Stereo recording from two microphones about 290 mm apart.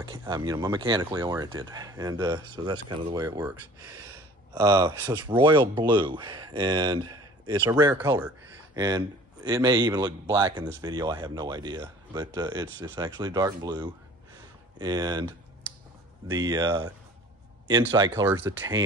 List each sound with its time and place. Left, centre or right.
0.0 s speech: centre
16.3 s speech: centre